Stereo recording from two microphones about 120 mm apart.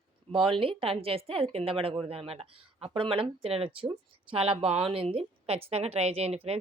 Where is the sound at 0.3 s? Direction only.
45° right (ahead or behind).